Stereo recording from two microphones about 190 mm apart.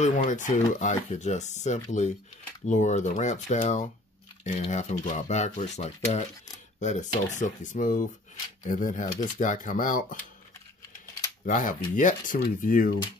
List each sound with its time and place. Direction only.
0.0 s speech: 40° left (ahead or behind)
11.4 s speech: 45° left (ahead or behind)